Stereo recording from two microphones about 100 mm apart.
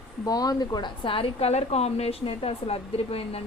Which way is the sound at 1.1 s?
65° left (ahead or behind).